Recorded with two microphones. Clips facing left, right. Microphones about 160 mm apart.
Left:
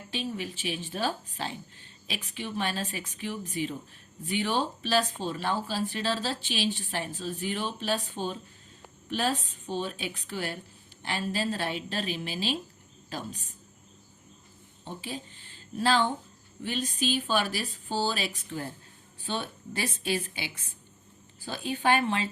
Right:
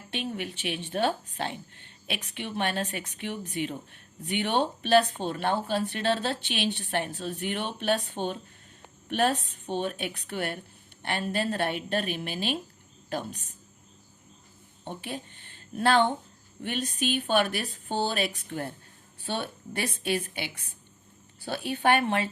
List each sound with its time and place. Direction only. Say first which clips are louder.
0.1 s speech: right 1 dB; 60° right (ahead or behind)
14.8 s speech: right 2 dB; 60° right (ahead or behind)